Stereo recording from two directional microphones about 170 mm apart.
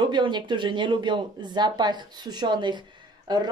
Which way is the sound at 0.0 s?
25° right (ahead or behind).